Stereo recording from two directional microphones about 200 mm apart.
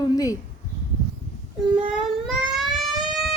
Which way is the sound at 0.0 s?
15° left (ahead or behind).